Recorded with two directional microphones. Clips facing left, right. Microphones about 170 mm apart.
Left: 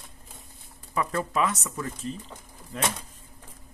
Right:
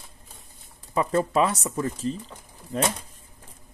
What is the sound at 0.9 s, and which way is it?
Speech, 25° right (ahead or behind).